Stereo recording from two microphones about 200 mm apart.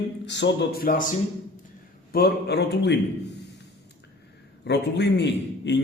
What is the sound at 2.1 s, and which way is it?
Speech, 50° left (ahead or behind).